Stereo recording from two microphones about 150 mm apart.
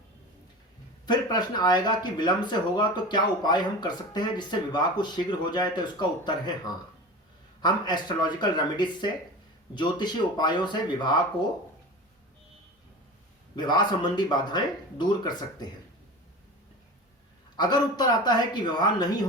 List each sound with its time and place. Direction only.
1.0 s speech: 30° left (ahead or behind)
7.6 s speech: 30° left (ahead or behind)
13.6 s speech: 30° left (ahead or behind)
17.6 s speech: 30° left (ahead or behind)